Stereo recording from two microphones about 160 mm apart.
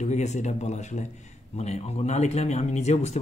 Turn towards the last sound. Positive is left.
turn(degrees=45)  # may be behind; listen again after turning